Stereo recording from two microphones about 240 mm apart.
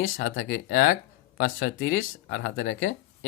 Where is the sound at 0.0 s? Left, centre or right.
Left.